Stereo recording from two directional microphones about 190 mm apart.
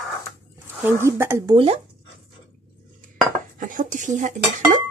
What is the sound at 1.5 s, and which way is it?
Speech, 30° right (ahead or behind).